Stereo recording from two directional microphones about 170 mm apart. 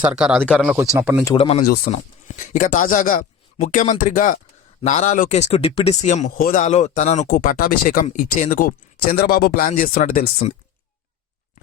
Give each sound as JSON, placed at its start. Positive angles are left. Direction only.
{"t": 0.0, "sound": "speech", "side_deg": -5}
{"t": 0.8, "sound": "speech", "side_deg": -15}
{"t": 1.4, "sound": "speech", "side_deg": 35}
{"t": 1.6, "sound": "speech", "side_deg": 65}
{"t": 1.9, "sound": "speech", "side_deg": 45}
{"t": 8.0, "sound": "speech", "side_deg": 50}